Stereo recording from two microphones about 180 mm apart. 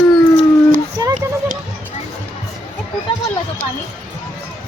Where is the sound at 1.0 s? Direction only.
20° right (ahead or behind).